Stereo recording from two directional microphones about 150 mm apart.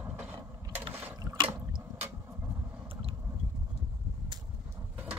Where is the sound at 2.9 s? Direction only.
40° right (ahead or behind).